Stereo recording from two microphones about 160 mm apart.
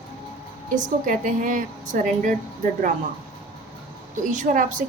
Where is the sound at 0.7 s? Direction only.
55° right (ahead or behind).